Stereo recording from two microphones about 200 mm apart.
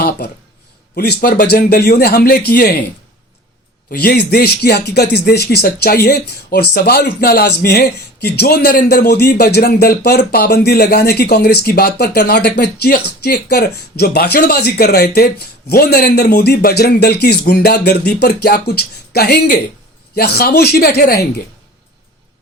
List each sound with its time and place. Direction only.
0.2 s speech: 55° left (ahead or behind)
3.9 s speech: 55° left (ahead or behind)